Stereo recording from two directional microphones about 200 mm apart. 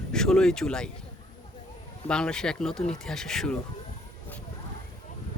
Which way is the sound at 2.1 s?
5° left (ahead or behind).